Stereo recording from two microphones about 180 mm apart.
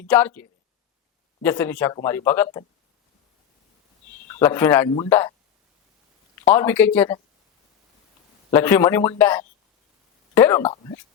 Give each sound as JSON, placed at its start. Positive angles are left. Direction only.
{"t": 0.1, "sound": "speech", "side_deg": 10}
{"t": 4.3, "sound": "a man's voice", "side_deg": 10}
{"t": 6.4, "sound": "speech", "side_deg": 10}
{"t": 8.5, "sound": "speech", "side_deg": 10}
{"t": 10.6, "sound": "speech", "side_deg": 30}